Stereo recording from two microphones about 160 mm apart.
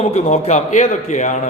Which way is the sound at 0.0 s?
45° left (ahead or behind).